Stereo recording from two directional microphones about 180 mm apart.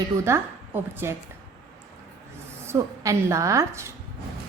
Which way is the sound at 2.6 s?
15° right (ahead or behind).